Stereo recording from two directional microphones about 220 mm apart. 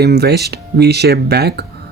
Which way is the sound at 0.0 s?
45° right (ahead or behind).